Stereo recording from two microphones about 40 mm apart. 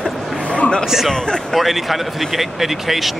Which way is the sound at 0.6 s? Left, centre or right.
Left.